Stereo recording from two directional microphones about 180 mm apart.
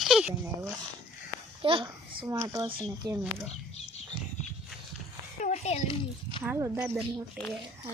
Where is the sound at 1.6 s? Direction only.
30° right (ahead or behind).